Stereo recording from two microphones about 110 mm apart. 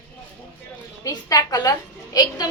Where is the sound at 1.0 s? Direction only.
35° left (ahead or behind).